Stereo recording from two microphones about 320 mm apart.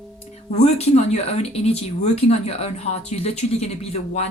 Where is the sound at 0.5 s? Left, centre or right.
Centre.